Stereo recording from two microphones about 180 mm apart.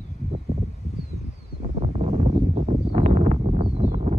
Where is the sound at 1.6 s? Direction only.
35° right (ahead or behind).